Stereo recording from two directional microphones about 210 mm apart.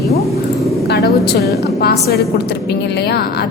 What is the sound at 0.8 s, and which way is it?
A woman's voice, 50° left (ahead or behind).